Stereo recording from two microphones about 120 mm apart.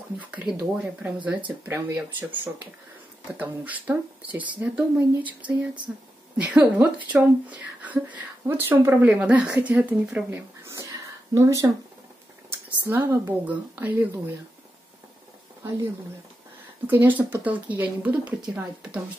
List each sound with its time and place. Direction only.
0.2 s speech: 10° right (ahead or behind)
3.3 s speech: 15° right (ahead or behind)
10.7 s a sound: 25° right (ahead or behind)
12.6 s speech: 15° right (ahead or behind)
16.8 s speech: 15° right (ahead or behind)